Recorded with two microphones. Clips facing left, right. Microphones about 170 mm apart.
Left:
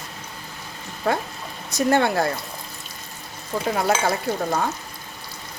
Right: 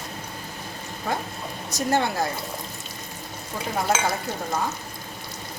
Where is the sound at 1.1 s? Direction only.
80° left.